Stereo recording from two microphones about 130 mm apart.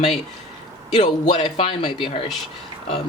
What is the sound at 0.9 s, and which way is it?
Speech, 60° left (ahead or behind).